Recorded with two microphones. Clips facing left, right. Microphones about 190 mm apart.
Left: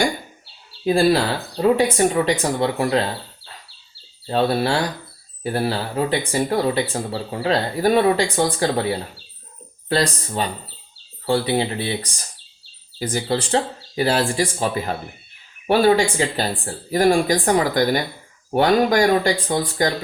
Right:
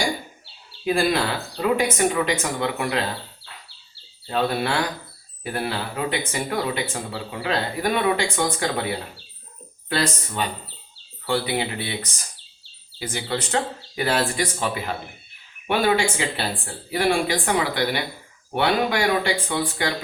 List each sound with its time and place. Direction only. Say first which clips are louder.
0.9 s speech: left 5 dB; 35° left (ahead or behind)
4.3 s speech: left 4 dB; 35° left (ahead or behind)
9.9 s speech: left 4 dB; 35° left (ahead or behind)